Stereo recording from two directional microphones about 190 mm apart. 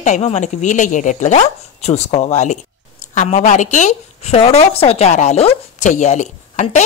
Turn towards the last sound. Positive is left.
turn(degrees=40)  # may be behind; listen again after turning